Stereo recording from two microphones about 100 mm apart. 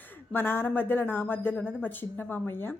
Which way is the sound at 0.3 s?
20° left (ahead or behind).